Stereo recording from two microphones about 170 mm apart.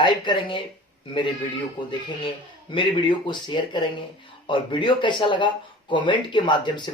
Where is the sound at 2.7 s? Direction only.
30° left (ahead or behind).